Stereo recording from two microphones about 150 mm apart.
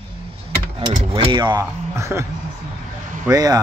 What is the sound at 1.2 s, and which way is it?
Speech, 35° right (ahead or behind).